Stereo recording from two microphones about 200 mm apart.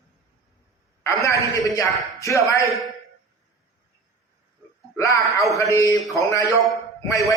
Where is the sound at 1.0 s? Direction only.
15° left (ahead or behind).